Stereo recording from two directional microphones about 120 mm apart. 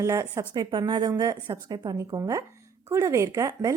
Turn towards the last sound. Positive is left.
turn(degrees=-30)  # may be behind; listen again after turning